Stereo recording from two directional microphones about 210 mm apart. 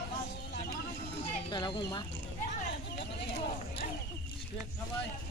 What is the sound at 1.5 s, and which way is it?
Speech, 20° left (ahead or behind).